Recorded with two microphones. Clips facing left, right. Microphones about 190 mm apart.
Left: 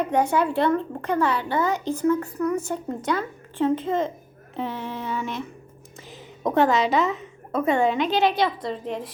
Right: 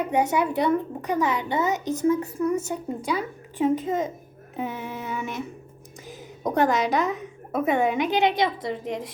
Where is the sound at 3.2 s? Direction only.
15° right (ahead or behind).